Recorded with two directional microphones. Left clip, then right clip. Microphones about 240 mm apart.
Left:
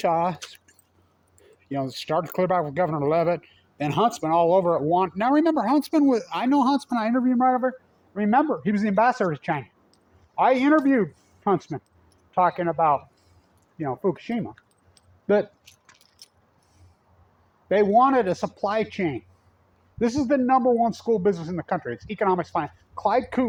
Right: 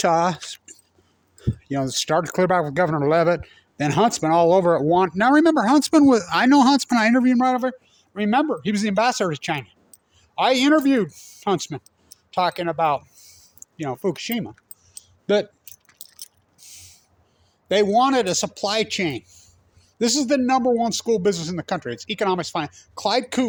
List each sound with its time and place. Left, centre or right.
0.1 s speech: right
1.4 s speech: right
7.6 s speech: right
14.9 s clicking: centre
15.7 s keys jangling: centre
17.7 s speech: centre